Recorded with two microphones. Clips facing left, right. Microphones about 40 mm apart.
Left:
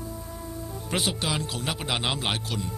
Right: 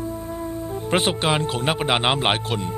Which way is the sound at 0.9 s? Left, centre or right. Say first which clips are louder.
Right 8 dB; right.